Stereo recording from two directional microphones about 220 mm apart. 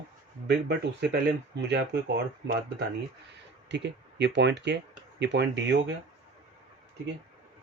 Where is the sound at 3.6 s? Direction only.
50° right (ahead or behind).